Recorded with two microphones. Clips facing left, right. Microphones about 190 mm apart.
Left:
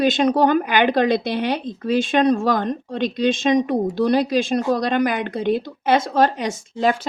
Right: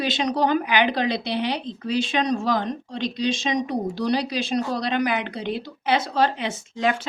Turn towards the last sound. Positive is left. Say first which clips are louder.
# left 4 dB
turn(degrees=40)  # may be behind; listen again after turning